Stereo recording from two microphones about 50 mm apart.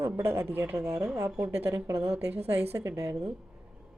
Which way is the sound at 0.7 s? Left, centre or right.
Right.